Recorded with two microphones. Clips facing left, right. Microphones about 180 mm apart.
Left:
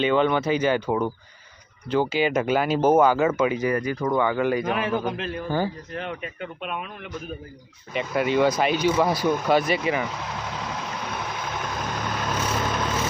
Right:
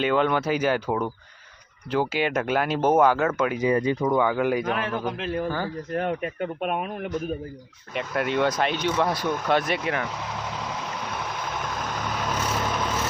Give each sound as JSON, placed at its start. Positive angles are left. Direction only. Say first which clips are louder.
{"t": 0.0, "sound": "speech", "louder": "left 1 dB", "side_deg": 0}
{"t": 3.6, "sound": "speech", "louder": "right 2 dB", "side_deg": -25}
{"t": 4.0, "sound": "speech", "louder": "even", "side_deg": -5}
{"t": 4.6, "sound": "speech", "louder": "left 2 dB", "side_deg": 5}
{"t": 5.5, "sound": "speech", "louder": "left 3 dB", "side_deg": 15}
{"t": 5.9, "sound": "speech", "louder": "right 6 dB", "side_deg": -50}
{"t": 7.9, "sound": "vehicle", "louder": "left 3 dB", "side_deg": 0}